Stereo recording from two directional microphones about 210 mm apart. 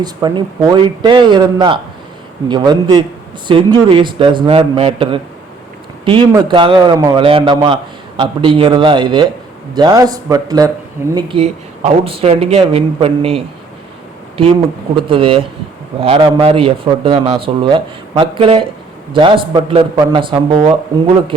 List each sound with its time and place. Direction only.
0.0 s a man's voice: 20° right (ahead or behind)
15.0 s a man's voice: 25° right (ahead or behind)